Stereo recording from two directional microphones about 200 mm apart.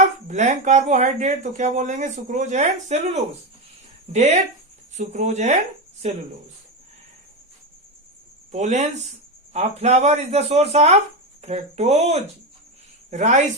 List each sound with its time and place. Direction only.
0.3 s speech: 35° right (ahead or behind)
8.5 s a woman's voice: 35° right (ahead or behind)